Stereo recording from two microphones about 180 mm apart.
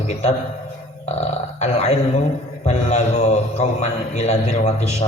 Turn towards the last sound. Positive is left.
turn(degrees=40)  # may be behind; listen again after turning